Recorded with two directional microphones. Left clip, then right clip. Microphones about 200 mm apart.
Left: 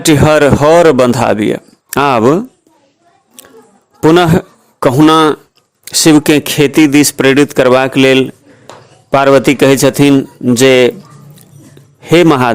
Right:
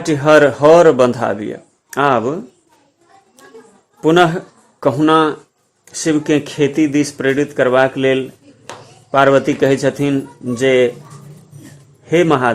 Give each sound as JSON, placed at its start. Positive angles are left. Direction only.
{"t": 0.0, "sound": "speech", "side_deg": 35}
{"t": 4.0, "sound": "a man's voice", "side_deg": 40}
{"t": 12.0, "sound": "speech", "side_deg": 40}